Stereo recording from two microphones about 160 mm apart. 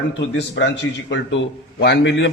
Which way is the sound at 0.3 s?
90° left.